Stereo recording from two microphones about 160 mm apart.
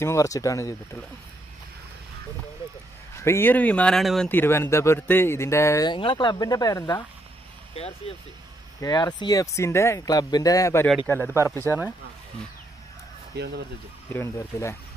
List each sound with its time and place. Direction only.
0.0 s speech: 20° left (ahead or behind)
3.2 s speech: 15° left (ahead or behind)
4.3 s speech: 15° left (ahead or behind)
5.9 s speech: 30° left (ahead or behind)
8.1 s speech: 40° left (ahead or behind)
8.8 s speech: 25° left (ahead or behind)
11.1 s speech: 5° left (ahead or behind)
13.4 s speech: 90° right
14.1 s speech: 15° left (ahead or behind)